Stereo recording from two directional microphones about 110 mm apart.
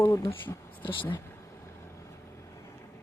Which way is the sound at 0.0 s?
25° left (ahead or behind).